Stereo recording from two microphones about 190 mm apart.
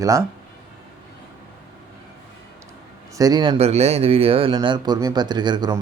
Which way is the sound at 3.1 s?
20° right (ahead or behind).